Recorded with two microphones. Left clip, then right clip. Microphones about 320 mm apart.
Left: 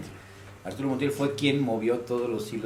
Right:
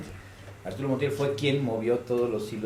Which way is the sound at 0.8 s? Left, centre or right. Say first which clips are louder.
Even; right.